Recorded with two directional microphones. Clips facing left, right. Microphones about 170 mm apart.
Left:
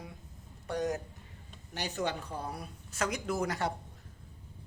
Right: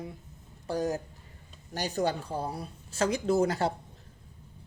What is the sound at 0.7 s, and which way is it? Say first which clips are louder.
Speech: right 3 dB; 30° right (ahead or behind).